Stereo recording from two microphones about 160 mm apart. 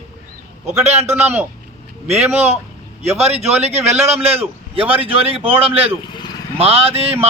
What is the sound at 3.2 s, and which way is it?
A man's voice, 40° right (ahead or behind).